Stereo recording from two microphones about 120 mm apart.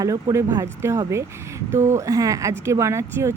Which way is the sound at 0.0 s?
30° right (ahead or behind).